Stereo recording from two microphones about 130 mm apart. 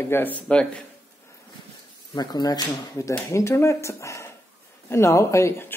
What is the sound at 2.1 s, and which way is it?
Speech, 30° left (ahead or behind).